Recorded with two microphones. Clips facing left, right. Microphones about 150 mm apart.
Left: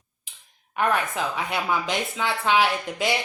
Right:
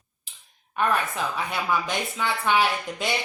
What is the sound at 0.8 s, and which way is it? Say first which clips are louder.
A woman's voice: left 1 dB; 15° left (ahead or behind).